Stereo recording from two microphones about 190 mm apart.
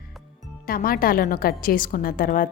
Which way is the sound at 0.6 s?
50° left (ahead or behind).